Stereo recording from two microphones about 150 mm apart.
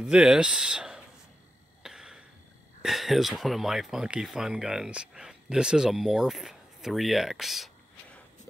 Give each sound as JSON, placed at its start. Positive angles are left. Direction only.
{"t": 0.0, "sound": "speech", "side_deg": -5}
{"t": 1.8, "sound": "cough", "side_deg": -5}
{"t": 2.8, "sound": "speech", "side_deg": 0}